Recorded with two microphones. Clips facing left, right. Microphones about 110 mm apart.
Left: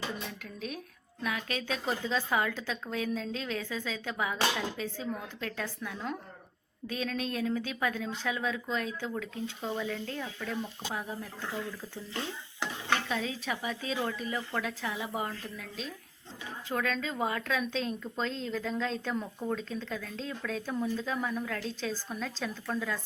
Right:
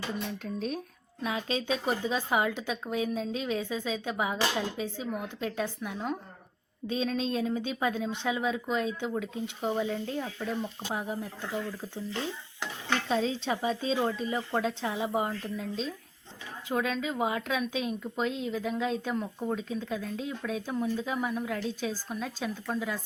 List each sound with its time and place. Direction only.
0.4 s speech: 35° right (ahead or behind)
1.2 s a woman's voice: 25° right (ahead or behind)
13.1 s a woman's voice: 30° right (ahead or behind); by 19.5 s 5° right (ahead or behind)
19.5 s a woman's voice: 15° right (ahead or behind)